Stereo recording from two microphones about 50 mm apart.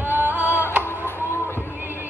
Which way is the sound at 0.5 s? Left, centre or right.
Left.